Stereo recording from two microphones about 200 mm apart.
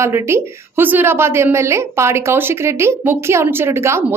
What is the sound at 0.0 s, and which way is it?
A woman's voice, 10° right (ahead or behind).